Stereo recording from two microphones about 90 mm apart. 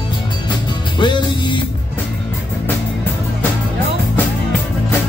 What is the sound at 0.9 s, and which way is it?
Music, 60° left (ahead or behind).